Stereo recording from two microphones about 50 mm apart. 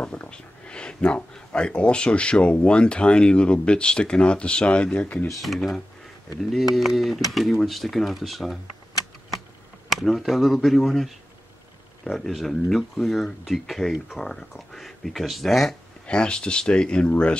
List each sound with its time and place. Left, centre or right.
0.3 s speech: centre
5.0 s speech: left
6.5 s speech: centre
9.8 s speech: centre
16.1 s speech: centre